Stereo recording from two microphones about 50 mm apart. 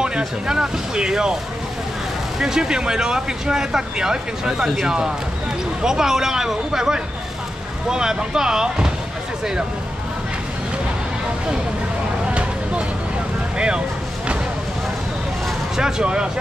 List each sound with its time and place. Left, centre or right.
0.5 s speech: centre
2.3 s speech: centre
12.3 s a sound: right
15.7 s speech: centre